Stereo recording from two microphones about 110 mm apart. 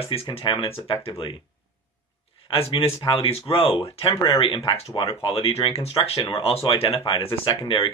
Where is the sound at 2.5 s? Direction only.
60° left (ahead or behind).